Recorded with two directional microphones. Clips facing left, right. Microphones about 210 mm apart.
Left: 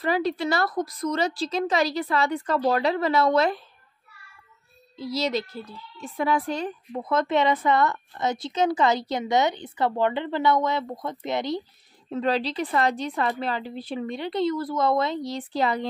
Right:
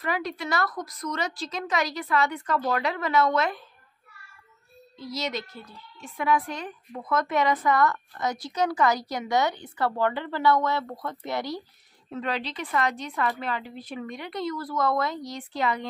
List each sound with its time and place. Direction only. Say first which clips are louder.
0.0 s a woman's voice: left 6 dB; 30° left (ahead or behind)
4.9 s a child's voice: left 5 dB; 30° left (ahead or behind)
12.1 s a woman's voice: left 6 dB; 35° left (ahead or behind)